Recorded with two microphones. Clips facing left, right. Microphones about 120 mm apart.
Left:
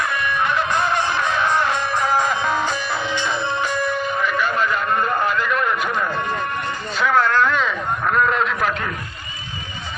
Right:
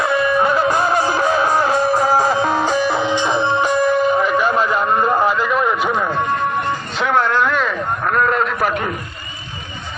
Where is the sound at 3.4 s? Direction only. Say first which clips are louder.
Right 6 dB; 25° right (ahead or behind).